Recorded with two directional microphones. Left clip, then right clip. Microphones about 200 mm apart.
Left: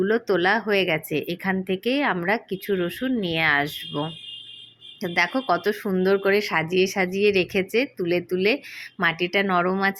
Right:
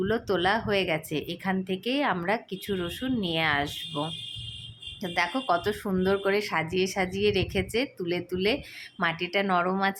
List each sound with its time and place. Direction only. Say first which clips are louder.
0.0 s speech: left 5 dB; 15° left (ahead or behind)